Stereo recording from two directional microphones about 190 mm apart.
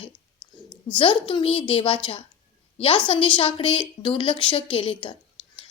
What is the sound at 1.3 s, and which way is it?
A woman's voice, 30° left (ahead or behind).